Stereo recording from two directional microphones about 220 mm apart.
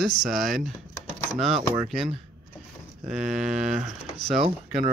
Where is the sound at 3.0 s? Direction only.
Centre (ahead or behind).